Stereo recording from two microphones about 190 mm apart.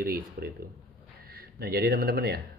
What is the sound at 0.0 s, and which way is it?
Speech, 50° right (ahead or behind).